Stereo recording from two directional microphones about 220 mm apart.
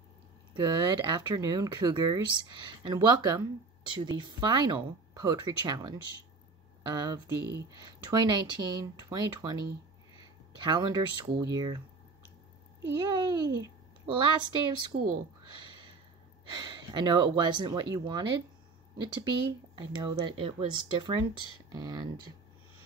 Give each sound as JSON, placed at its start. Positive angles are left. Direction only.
{"t": 0.6, "sound": "speech", "side_deg": -20}
{"t": 10.2, "sound": "a sound", "side_deg": -20}
{"t": 11.3, "sound": "speech", "side_deg": -15}
{"t": 12.9, "sound": "a child's voice", "side_deg": -20}
{"t": 15.5, "sound": "a sound", "side_deg": -20}
{"t": 16.4, "sound": "a child's voice", "side_deg": -20}